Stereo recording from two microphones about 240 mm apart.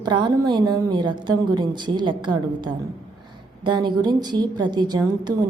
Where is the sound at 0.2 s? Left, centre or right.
Centre.